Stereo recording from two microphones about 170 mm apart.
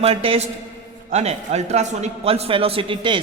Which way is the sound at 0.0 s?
35° right (ahead or behind).